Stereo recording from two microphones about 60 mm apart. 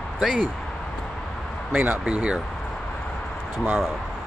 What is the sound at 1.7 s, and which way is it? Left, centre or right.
Speech, right.